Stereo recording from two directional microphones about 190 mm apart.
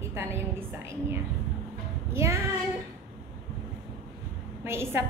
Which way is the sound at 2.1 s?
15° right (ahead or behind).